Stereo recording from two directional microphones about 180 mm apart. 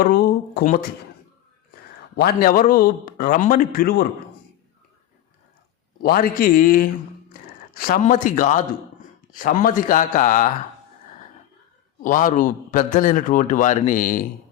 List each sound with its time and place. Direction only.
0.0 s speech: 55° left (ahead or behind)
2.1 s a man's voice: 60° left (ahead or behind)
6.0 s a man's voice: 55° left (ahead or behind)
8.0 s a man's voice: 45° left (ahead or behind)
12.0 s a man's voice: 50° left (ahead or behind)